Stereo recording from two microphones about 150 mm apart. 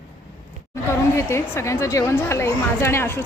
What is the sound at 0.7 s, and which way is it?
A woman's voice, 20° left (ahead or behind).